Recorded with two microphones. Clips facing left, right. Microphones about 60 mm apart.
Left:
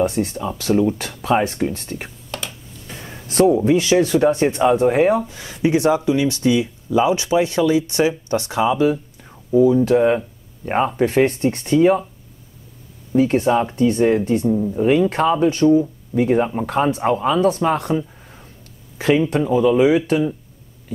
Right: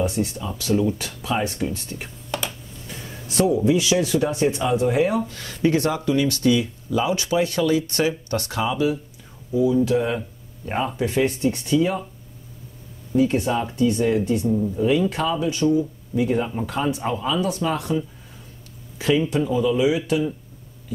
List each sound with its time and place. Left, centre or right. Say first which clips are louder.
0.0 s speech: left 4 dB; left
3.3 s speech: left 4 dB; left
5.2 s speech: left 1 dB; centre
9.5 s speech: left 5 dB; left
13.1 s speech: left 4 dB; left
18.9 s speech: left 4 dB; left